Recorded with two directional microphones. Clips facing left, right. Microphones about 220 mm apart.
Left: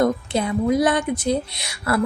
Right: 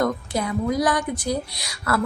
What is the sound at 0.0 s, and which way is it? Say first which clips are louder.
A woman's voice: left 3 dB; 25° left (ahead or behind).